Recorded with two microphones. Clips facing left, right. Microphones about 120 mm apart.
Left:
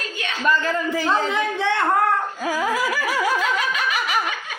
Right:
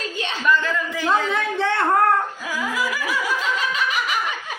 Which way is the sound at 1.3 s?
Centre (ahead or behind).